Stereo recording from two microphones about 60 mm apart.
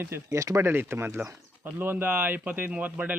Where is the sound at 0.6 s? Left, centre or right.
Right.